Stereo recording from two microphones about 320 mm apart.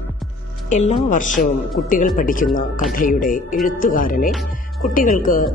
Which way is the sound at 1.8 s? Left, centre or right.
Left.